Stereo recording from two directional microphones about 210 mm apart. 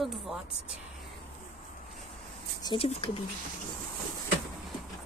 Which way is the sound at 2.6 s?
25° left (ahead or behind).